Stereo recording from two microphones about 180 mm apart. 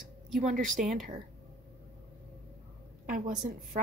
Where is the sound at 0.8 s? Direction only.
50° right (ahead or behind).